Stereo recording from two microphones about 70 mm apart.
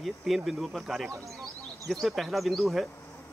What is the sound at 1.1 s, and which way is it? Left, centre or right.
Speech, right.